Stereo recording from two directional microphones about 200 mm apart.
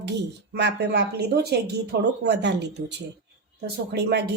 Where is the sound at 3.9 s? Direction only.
55° right (ahead or behind).